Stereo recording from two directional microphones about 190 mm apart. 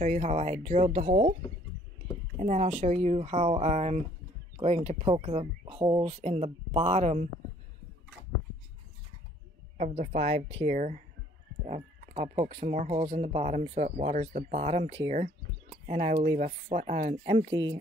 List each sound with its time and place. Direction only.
0.0 s speech: 40° right (ahead or behind)
2.3 s speech: 35° right (ahead or behind)
9.8 s speech: 40° right (ahead or behind)
17.5 s speech: 75° right (ahead or behind)